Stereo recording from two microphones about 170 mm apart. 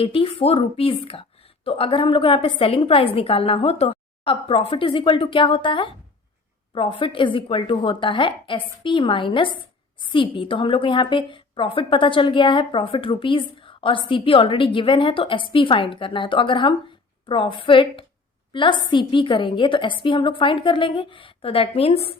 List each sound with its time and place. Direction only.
0.0 s a woman's voice: 35° left (ahead or behind)